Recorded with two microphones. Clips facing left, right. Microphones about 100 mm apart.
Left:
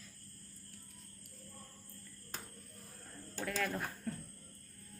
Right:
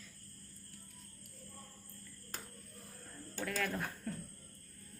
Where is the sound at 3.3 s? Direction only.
5° left (ahead or behind).